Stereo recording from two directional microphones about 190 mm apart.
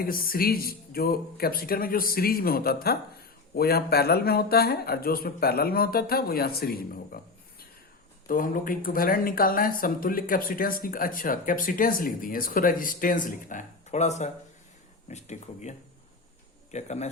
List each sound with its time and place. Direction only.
0.0 s speech: 50° left (ahead or behind)
8.3 s speech: 45° left (ahead or behind)
16.7 s speech: 35° left (ahead or behind)